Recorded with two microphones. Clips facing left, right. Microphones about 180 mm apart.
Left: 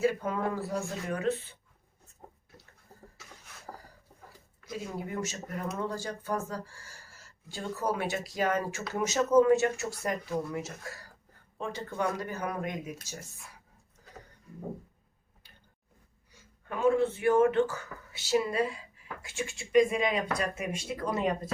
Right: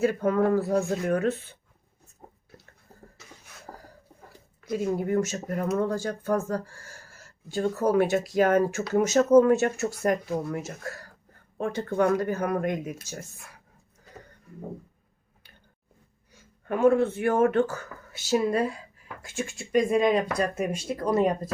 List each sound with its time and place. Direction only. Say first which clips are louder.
0.0 s speech: right 6 dB; 55° right (ahead or behind)
4.8 s speech: right 10 dB; 50° right (ahead or behind)
16.6 s speech: right 5 dB; 55° right (ahead or behind)